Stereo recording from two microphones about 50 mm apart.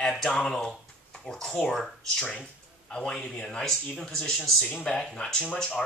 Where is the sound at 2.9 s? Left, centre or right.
Centre.